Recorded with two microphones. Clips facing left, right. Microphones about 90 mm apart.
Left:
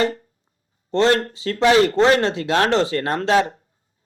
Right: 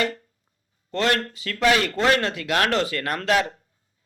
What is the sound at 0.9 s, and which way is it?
Speech, 30° left (ahead or behind).